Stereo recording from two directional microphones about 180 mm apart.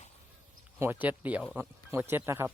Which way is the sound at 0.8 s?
10° right (ahead or behind).